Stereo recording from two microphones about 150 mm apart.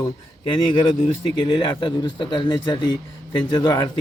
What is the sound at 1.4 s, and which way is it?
A man's voice, 30° left (ahead or behind).